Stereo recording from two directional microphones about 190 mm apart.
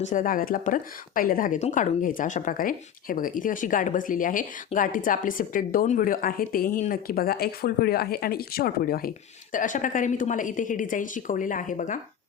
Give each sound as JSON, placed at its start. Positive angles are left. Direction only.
{"t": 0.0, "sound": "a woman's voice", "side_deg": 45}